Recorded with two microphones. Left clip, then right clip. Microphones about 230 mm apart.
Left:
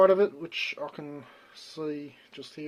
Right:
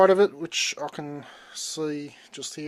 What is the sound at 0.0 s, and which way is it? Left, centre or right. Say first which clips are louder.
Speech: right 3 dB; right.